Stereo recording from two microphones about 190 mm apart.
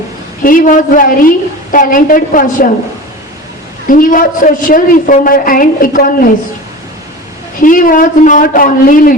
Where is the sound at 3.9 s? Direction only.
45° left (ahead or behind).